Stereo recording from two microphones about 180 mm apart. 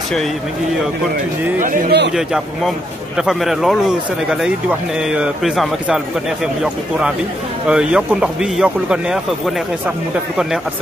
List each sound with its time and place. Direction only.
1.6 s a man's voice: 50° right (ahead or behind)
2.1 s a man's voice: centre (ahead or behind)